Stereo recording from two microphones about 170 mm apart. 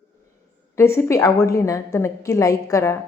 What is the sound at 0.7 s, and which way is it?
A woman's voice, 15° left (ahead or behind).